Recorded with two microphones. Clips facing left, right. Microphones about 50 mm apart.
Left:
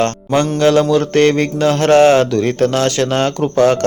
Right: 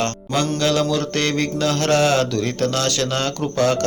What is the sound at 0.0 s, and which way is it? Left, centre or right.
Mantra, left.